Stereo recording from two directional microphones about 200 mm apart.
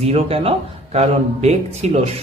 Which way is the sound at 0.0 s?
30° right (ahead or behind).